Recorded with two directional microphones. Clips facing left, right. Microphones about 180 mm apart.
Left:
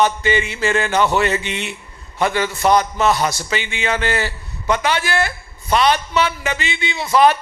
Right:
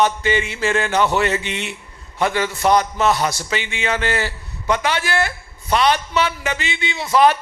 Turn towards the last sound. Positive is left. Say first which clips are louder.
# left 1 dB
turn(degrees=15)  # may be behind; listen again after turning